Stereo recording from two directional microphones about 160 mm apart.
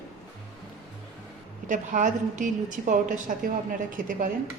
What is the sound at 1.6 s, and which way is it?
A woman's voice, 50° right (ahead or behind).